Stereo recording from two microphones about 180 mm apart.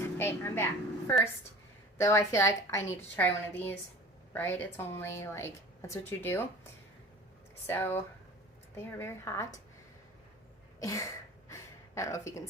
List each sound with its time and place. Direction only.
0.0 s a woman's voice: 15° left (ahead or behind)
7.7 s a woman's voice: 10° left (ahead or behind)
10.8 s a sound: 15° left (ahead or behind)